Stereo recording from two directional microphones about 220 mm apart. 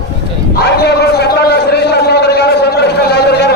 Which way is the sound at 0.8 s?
50° left (ahead or behind).